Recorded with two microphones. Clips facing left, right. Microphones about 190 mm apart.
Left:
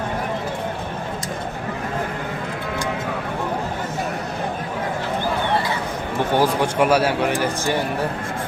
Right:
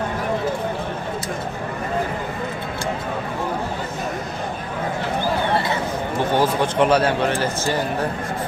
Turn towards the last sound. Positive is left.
turn(degrees=15)  # may be behind; listen again after turning